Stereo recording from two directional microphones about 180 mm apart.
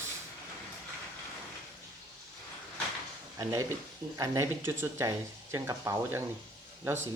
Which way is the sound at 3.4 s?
20° right (ahead or behind).